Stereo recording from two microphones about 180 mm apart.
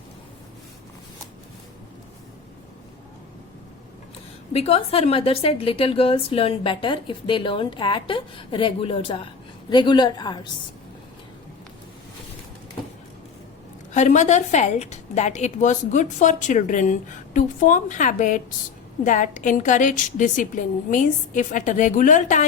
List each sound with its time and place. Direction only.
4.5 s a woman's voice: 35° left (ahead or behind)
13.9 s a woman's voice: 40° left (ahead or behind)